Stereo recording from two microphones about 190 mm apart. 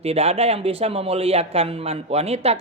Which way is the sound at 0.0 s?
35° right (ahead or behind).